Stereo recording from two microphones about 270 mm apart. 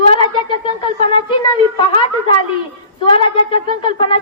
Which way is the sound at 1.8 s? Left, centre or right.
Centre.